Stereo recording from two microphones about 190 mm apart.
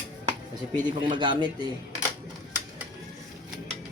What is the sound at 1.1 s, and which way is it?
Speech, 25° right (ahead or behind).